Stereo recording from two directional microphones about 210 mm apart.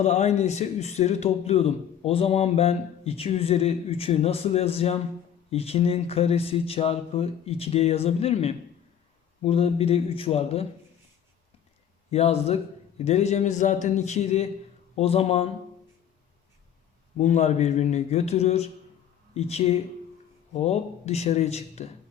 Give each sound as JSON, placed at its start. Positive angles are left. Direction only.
{"t": 0.0, "sound": "a man's voice", "side_deg": 30}
{"t": 12.1, "sound": "a man's voice", "side_deg": 30}
{"t": 17.2, "sound": "speech", "side_deg": 35}